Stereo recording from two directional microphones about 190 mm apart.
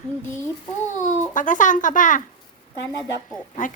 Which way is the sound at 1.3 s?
40° left (ahead or behind).